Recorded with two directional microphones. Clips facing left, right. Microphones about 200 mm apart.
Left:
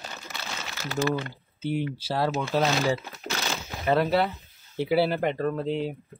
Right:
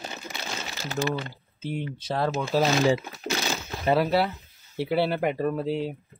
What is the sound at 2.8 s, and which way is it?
Speech, 15° right (ahead or behind).